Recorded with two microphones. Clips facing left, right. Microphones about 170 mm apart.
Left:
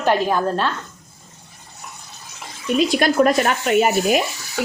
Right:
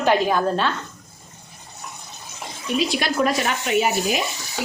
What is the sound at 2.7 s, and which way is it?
Speech, 50° left (ahead or behind).